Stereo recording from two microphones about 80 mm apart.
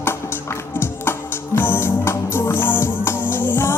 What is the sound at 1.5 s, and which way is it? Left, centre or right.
Music, left.